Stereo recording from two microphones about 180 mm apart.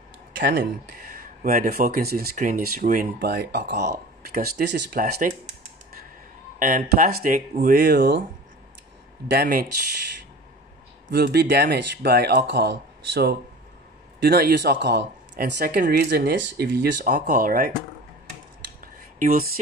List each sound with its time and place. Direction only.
0.4 s speech: 75° right (ahead or behind)
0.9 s speech: 50° right (ahead or behind)
6.6 s speech: 45° right (ahead or behind)
9.3 s speech: 55° right (ahead or behind)
11.1 s speech: 60° right (ahead or behind)
15.5 s speech: 55° right (ahead or behind)
18.9 s speech: 50° right (ahead or behind)